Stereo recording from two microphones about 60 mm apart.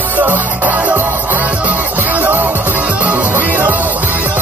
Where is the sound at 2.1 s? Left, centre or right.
Right.